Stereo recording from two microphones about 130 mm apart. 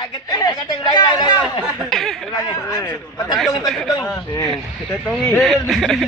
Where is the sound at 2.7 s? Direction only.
30° left (ahead or behind).